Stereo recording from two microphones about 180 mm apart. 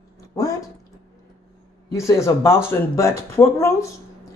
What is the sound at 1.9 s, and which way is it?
Speech, 15° left (ahead or behind).